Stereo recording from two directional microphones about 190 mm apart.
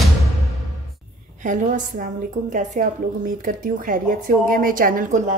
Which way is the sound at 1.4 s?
40° right (ahead or behind).